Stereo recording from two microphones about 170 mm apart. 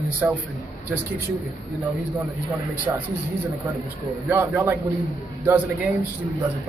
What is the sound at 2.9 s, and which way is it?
Speech, 15° right (ahead or behind).